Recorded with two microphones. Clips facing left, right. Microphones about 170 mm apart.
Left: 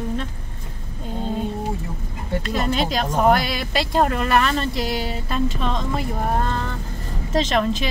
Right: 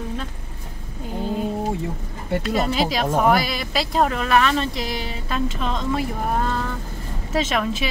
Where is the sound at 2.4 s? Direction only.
Centre (ahead or behind).